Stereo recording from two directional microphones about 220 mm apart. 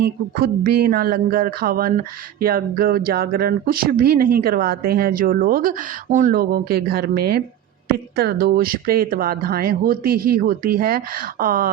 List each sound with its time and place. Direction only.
0.0 s speech: 45° right (ahead or behind)